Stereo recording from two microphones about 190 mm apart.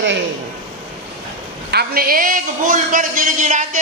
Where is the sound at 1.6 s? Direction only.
55° right (ahead or behind).